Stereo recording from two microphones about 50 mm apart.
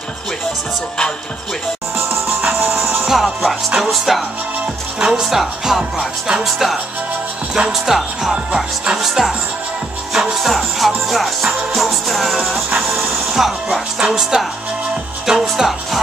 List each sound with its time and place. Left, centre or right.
2.0 s music: right
3.1 s music: centre
4.9 s speech: centre
6.4 s music: centre
7.5 s speech: centre
10.1 s music: centre
12.7 s speech: centre